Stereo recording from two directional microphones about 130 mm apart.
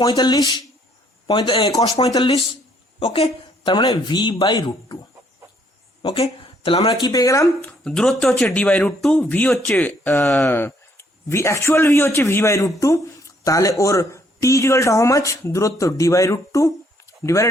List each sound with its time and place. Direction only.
0.0 s speech: 35° left (ahead or behind)
3.0 s speech: 50° left (ahead or behind)
3.8 s speech: 35° left (ahead or behind)
6.1 s speech: 50° left (ahead or behind)
7.0 s speech: 30° left (ahead or behind)
7.7 s speech: 5° left (ahead or behind); by 17.5 s 25° left (ahead or behind)